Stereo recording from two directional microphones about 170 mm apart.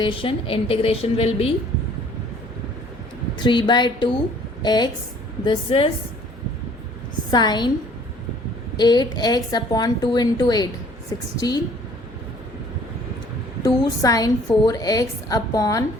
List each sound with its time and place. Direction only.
0.0 s a woman's voice: 30° left (ahead or behind)
3.3 s a woman's voice: 25° left (ahead or behind)
7.3 s a woman's voice: 25° left (ahead or behind)
8.7 s a woman's voice: 25° left (ahead or behind)
13.7 s speech: 20° left (ahead or behind)